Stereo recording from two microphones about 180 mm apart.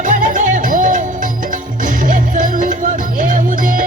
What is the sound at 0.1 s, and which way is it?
Music, 45° right (ahead or behind).